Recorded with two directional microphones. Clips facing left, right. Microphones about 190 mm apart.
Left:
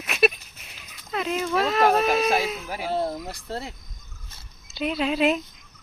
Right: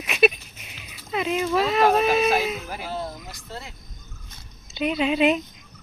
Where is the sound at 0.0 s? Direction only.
Centre (ahead or behind).